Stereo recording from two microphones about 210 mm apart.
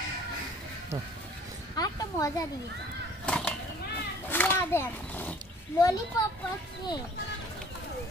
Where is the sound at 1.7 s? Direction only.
15° left (ahead or behind).